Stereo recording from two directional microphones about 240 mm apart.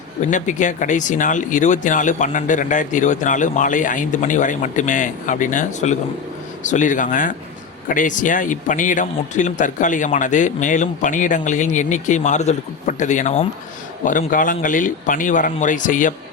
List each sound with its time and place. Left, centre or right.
0.2 s speech: left